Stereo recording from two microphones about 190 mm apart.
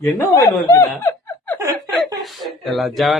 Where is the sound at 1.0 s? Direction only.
15° left (ahead or behind).